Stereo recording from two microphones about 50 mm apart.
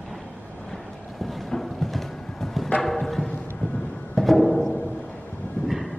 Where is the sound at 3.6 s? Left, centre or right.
Centre.